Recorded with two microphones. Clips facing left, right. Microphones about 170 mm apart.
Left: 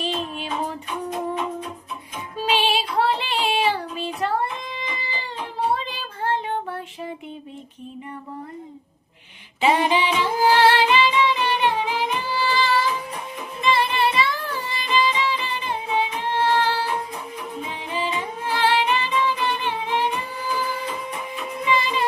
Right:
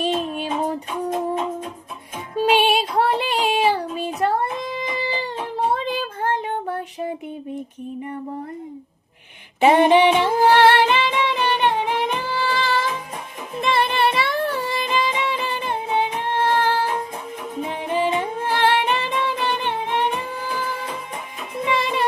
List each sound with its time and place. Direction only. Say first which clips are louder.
0.0 s a sound: right 5 dB; 50° right (ahead or behind)
2.4 s child singing: right 5 dB; 55° right (ahead or behind)
5.5 s child singing: right 3 dB; 50° right (ahead or behind)
9.6 s music: right 6 dB; 55° right (ahead or behind)
21.7 s music: even; 60° right (ahead or behind)